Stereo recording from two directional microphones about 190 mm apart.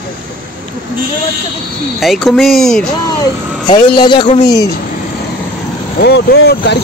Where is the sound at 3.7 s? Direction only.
25° left (ahead or behind).